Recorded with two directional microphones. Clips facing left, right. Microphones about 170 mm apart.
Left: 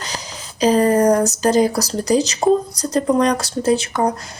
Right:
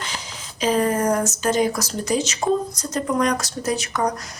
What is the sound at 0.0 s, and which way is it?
Speech, 40° left (ahead or behind).